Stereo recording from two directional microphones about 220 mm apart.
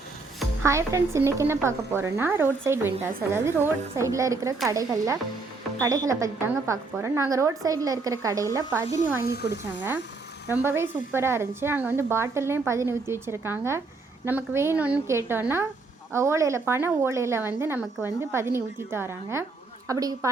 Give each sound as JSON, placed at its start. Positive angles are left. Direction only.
{"t": 0.6, "sound": "speech", "side_deg": -15}
{"t": 9.2, "sound": "speech", "side_deg": 45}
{"t": 10.5, "sound": "speech", "side_deg": -10}